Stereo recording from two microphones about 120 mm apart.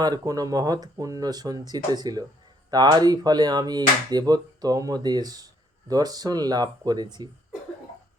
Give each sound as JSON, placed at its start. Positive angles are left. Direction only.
{"t": 0.0, "sound": "speech", "side_deg": -30}